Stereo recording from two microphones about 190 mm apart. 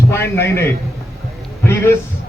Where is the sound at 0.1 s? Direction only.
15° left (ahead or behind).